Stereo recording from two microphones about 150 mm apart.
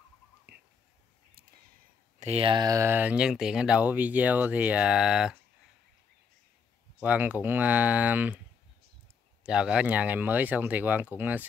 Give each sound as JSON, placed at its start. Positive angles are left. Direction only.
{"t": 2.1, "sound": "speech", "side_deg": -45}
{"t": 2.6, "sound": "speech", "side_deg": -20}
{"t": 7.0, "sound": "speech", "side_deg": -10}
{"t": 9.4, "sound": "speech", "side_deg": -5}